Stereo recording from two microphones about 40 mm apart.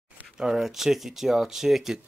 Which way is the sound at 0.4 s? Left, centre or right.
Centre.